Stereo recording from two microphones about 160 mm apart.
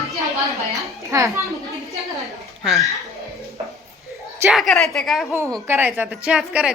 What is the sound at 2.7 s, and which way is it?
Speech, centre (ahead or behind).